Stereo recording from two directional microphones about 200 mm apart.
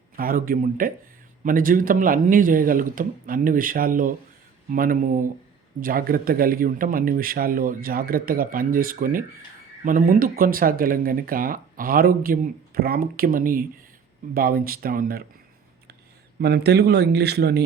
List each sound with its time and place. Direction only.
0.2 s speech: 45° right (ahead or behind)
16.4 s a man's voice: 55° right (ahead or behind)